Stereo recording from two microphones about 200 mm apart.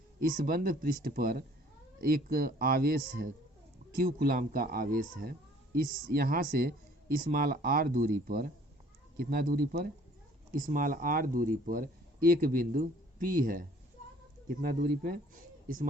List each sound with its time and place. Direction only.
0.2 s speech: 45° right (ahead or behind)